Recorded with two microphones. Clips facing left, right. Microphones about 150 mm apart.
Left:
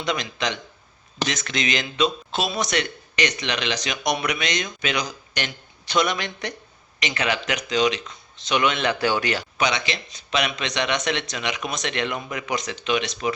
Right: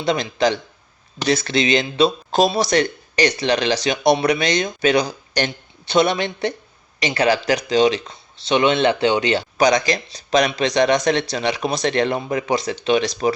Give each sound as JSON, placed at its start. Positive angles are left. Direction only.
{"t": 0.0, "sound": "speech", "side_deg": -30}